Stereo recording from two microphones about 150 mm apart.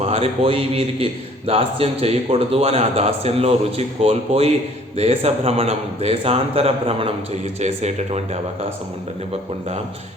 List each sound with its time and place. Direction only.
0.0 s a man's voice: 40° right (ahead or behind)